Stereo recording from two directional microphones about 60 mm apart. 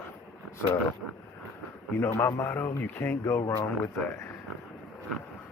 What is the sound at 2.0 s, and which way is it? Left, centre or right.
Speech, left.